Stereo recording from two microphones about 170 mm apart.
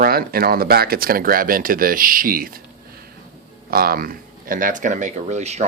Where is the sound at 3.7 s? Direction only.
60° right (ahead or behind).